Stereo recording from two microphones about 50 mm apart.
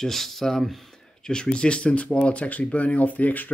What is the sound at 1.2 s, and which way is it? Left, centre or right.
Speech, centre.